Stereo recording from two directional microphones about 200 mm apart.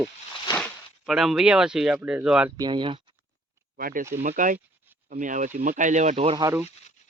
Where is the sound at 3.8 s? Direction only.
45° right (ahead or behind).